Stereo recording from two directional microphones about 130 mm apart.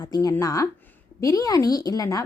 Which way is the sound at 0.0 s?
30° left (ahead or behind).